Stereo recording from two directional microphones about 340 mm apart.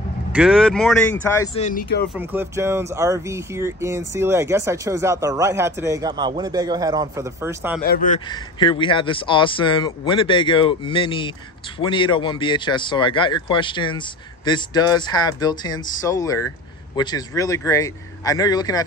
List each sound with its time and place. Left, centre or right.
0.3 s speech: centre; by 2.0 s left
2.1 s speech: centre
7.8 s speech: left
8.3 s speech: centre